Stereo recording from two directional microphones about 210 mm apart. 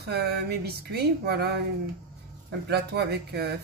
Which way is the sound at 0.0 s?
50° right (ahead or behind).